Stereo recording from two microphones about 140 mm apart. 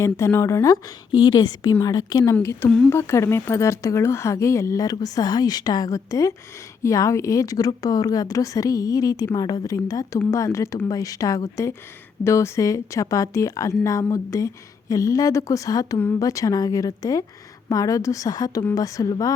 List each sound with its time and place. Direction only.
0.0 s a woman's voice: 20° left (ahead or behind)
2.6 s speech: 5° left (ahead or behind)
2.9 s a woman's voice: 20° left (ahead or behind)